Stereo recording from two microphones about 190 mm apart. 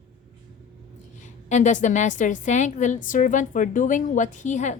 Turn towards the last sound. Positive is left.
turn(degrees=40)  # may be behind; listen again after turning